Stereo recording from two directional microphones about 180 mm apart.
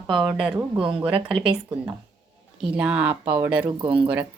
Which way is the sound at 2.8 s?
10° right (ahead or behind).